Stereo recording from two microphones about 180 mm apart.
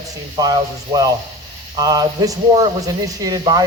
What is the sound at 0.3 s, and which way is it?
Speech, 20° right (ahead or behind).